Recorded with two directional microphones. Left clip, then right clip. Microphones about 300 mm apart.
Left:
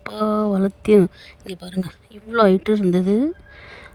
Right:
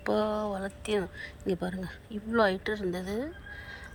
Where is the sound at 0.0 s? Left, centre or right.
Left.